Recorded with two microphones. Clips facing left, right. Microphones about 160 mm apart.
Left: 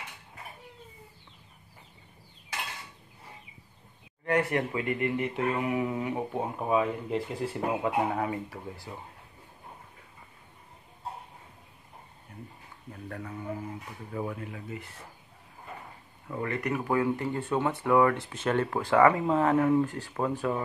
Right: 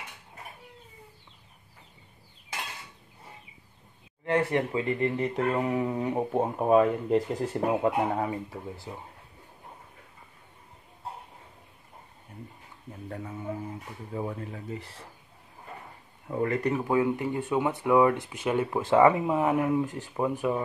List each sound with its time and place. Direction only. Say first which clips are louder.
4.3 s speech: right 1 dB; 25° right (ahead or behind)
6.6 s speech: right 6 dB; 50° right (ahead or behind)
7.8 s speech: right 2 dB; 30° right (ahead or behind)
12.9 s speech: right 1 dB; 25° right (ahead or behind)
16.3 s speech: right 4 dB; 40° right (ahead or behind)
16.8 s speech: right 2 dB; 20° right (ahead or behind)
18.8 s speech: right 2 dB; 20° right (ahead or behind)